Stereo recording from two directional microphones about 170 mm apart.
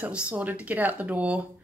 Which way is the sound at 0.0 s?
10° right (ahead or behind).